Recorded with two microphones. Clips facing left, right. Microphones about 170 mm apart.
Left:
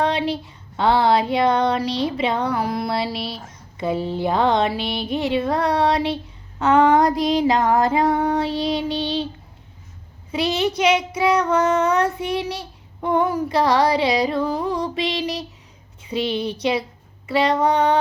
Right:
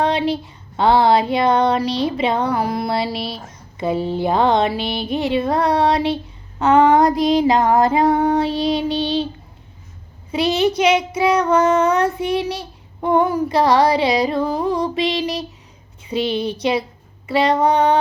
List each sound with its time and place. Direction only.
0.0 s a sound: 30° right (ahead or behind)
0.8 s speech: 30° right (ahead or behind)
10.3 s speech: 25° right (ahead or behind)
16.1 s speech: 20° right (ahead or behind)